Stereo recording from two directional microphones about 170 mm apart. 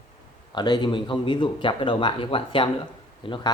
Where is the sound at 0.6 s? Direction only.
25° left (ahead or behind).